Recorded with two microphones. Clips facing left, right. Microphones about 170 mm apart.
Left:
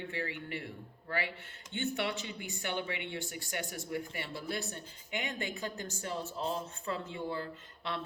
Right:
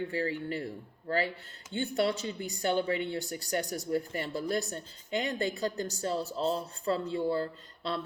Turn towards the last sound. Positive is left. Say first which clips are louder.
# right 4 dB
turn(degrees=-35)  # may be behind; listen again after turning